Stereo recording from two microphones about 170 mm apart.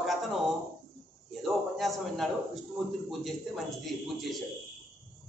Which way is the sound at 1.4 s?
Centre (ahead or behind).